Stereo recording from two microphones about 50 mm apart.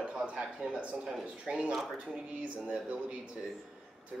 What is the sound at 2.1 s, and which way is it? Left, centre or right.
Speech, centre.